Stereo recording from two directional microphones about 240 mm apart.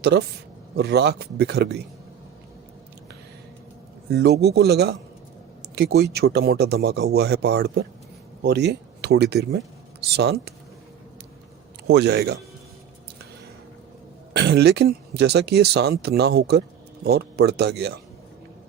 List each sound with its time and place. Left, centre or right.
0.0 s speech: right
4.1 s speech: right
11.9 s speech: right
14.3 s speech: right